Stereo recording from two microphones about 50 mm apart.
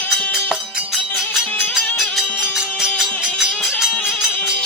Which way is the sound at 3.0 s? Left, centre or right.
Centre.